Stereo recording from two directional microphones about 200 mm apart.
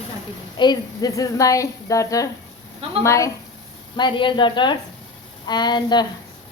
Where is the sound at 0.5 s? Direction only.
20° left (ahead or behind).